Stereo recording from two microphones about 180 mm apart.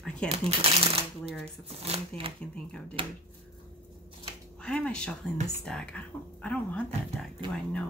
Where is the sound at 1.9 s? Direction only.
30° right (ahead or behind).